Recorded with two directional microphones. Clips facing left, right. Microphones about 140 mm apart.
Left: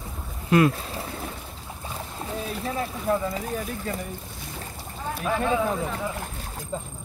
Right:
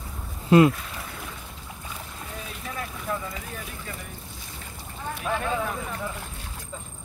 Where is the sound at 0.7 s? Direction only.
35° left (ahead or behind).